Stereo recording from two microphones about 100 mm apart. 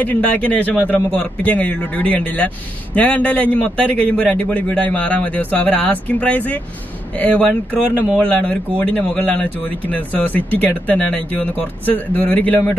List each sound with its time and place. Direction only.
0.0 s speech: 15° left (ahead or behind)